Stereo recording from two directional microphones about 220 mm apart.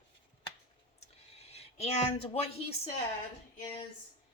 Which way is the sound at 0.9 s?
30° left (ahead or behind).